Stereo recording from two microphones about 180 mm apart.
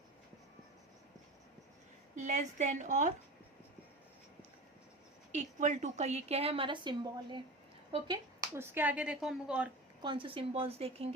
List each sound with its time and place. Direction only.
2.1 s a woman's voice: 40° right (ahead or behind)
5.3 s a woman's voice: 40° right (ahead or behind); by 9.6 s 5° right (ahead or behind)
10.0 s a woman's voice: 25° right (ahead or behind)